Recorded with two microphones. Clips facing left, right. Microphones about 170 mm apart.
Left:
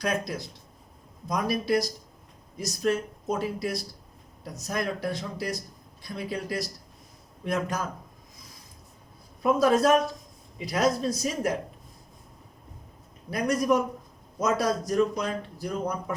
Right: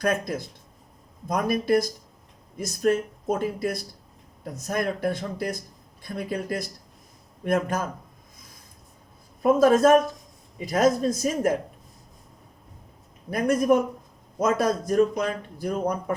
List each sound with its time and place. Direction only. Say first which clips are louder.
0.0 s speech: right 4 dB; 50° right (ahead or behind)
9.4 s speech: right 4 dB; 50° right (ahead or behind)
13.3 s speech: right 4 dB; 50° right (ahead or behind)